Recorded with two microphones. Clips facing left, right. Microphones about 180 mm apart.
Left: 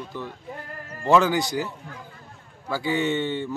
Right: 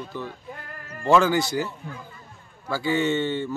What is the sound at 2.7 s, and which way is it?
Speech, 15° left (ahead or behind).